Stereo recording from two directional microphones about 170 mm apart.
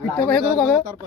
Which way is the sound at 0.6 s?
5° left (ahead or behind).